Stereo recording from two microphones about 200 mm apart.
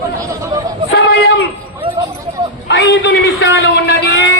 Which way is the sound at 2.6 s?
60° left (ahead or behind).